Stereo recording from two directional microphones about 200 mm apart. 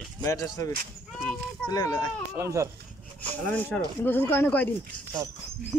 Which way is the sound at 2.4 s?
15° right (ahead or behind).